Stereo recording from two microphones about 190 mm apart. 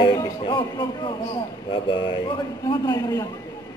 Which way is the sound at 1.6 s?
25° left (ahead or behind).